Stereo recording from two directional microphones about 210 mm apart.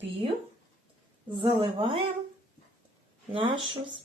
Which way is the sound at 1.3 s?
25° right (ahead or behind).